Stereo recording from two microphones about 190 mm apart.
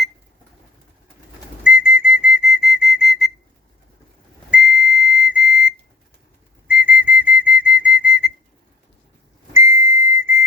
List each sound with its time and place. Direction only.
1.6 s whistle: 5° right (ahead or behind)
4.5 s whistle: 5° right (ahead or behind)
9.6 s whistle: 15° right (ahead or behind)